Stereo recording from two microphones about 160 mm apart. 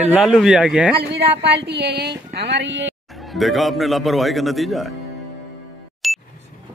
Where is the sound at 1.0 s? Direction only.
90° right.